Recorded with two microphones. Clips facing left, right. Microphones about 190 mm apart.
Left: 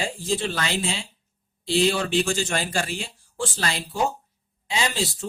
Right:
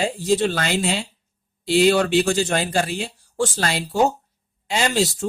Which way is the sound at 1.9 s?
40° right (ahead or behind).